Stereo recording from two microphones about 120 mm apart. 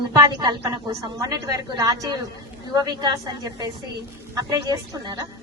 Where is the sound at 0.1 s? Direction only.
30° right (ahead or behind).